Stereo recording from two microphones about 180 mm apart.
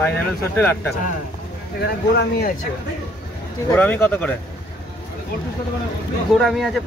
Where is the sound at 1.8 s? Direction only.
60° left (ahead or behind).